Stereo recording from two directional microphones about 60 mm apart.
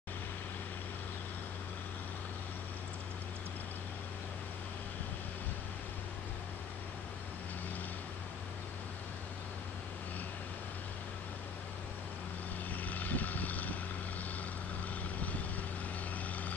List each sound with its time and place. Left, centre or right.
12.8 s vehicle: left